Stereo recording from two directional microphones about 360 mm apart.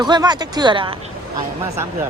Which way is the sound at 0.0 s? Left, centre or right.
Centre.